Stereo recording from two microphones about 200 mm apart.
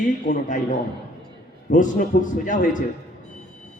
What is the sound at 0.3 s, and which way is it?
Speech, 40° left (ahead or behind).